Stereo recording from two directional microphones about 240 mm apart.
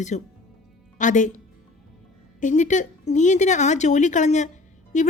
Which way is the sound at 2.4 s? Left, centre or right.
Left.